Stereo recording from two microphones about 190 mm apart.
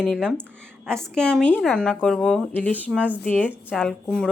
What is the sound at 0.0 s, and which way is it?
Speech, 5° left (ahead or behind).